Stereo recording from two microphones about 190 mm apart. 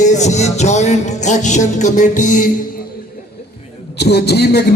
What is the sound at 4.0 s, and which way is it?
Speech, 60° left (ahead or behind).